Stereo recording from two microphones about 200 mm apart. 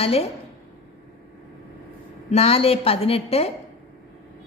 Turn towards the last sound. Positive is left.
turn(degrees=30)  # may be behind; listen again after turning